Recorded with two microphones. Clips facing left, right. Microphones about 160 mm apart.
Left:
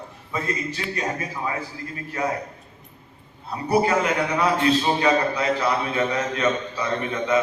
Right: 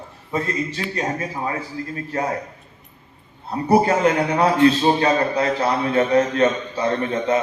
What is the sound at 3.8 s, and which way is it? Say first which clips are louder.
A man's voice: right 4 dB; 35° right (ahead or behind).